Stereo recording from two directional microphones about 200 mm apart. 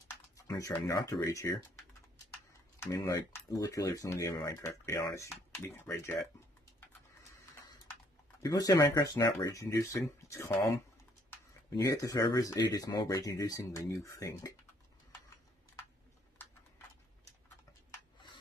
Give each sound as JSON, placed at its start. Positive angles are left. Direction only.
{"t": 0.4, "sound": "speech", "side_deg": 15}
{"t": 8.4, "sound": "speech", "side_deg": 15}
{"t": 11.7, "sound": "speech", "side_deg": 15}